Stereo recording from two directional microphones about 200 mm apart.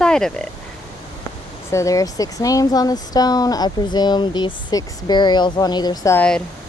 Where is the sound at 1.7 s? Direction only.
15° left (ahead or behind).